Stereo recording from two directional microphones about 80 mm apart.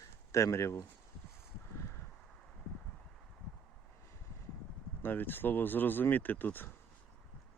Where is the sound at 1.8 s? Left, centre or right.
Left.